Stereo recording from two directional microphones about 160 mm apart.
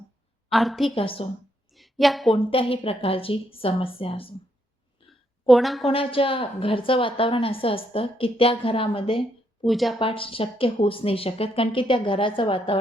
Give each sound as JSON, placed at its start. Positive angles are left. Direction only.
{"t": 0.5, "sound": "a woman's voice", "side_deg": 0}
{"t": 0.9, "sound": "a woman's voice", "side_deg": 35}
{"t": 1.7, "sound": "a sound", "side_deg": 0}
{"t": 2.3, "sound": "a woman's voice", "side_deg": 35}
{"t": 5.5, "sound": "a woman's voice", "side_deg": 0}
{"t": 5.8, "sound": "a woman's voice", "side_deg": 35}
{"t": 9.6, "sound": "a woman's voice", "side_deg": 0}
{"t": 10.0, "sound": "a woman's voice", "side_deg": 35}